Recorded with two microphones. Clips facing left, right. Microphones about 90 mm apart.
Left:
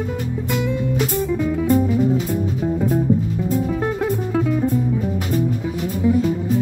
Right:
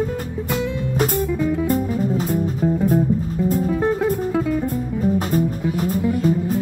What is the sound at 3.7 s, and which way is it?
Music, centre (ahead or behind).